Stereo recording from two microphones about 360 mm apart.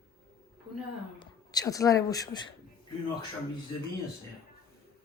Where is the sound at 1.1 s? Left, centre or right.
Centre.